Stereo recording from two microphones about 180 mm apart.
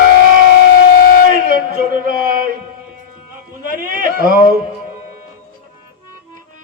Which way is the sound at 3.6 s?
50° right (ahead or behind).